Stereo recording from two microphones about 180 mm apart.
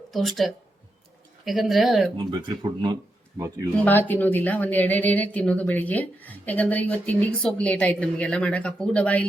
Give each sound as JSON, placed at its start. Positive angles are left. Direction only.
{"t": 0.1, "sound": "speech", "side_deg": 0}
{"t": 2.1, "sound": "speech", "side_deg": -25}
{"t": 3.8, "sound": "speech", "side_deg": 10}